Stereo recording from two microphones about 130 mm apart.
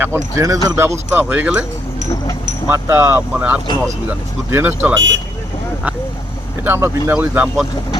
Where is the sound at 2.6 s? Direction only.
20° right (ahead or behind).